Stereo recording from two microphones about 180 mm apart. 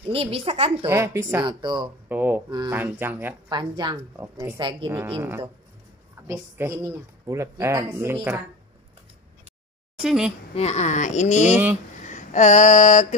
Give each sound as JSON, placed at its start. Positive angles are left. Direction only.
{"t": 0.0, "sound": "a woman's voice", "side_deg": -30}
{"t": 0.8, "sound": "speech", "side_deg": -15}
{"t": 1.4, "sound": "a woman's voice", "side_deg": -25}
{"t": 2.0, "sound": "speech", "side_deg": -10}
{"t": 3.4, "sound": "a woman's voice", "side_deg": -25}
{"t": 4.6, "sound": "a woman's voice", "side_deg": -25}
{"t": 6.2, "sound": "speech", "side_deg": -15}
{"t": 9.9, "sound": "a woman's voice", "side_deg": -5}
{"t": 10.5, "sound": "speech", "side_deg": 35}
{"t": 12.0, "sound": "a sound", "side_deg": 45}